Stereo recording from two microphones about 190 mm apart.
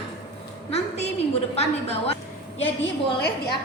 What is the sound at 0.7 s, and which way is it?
A woman's voice, 35° left (ahead or behind).